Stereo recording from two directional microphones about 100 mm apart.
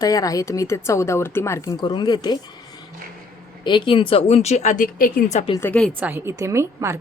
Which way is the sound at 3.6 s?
50° left (ahead or behind).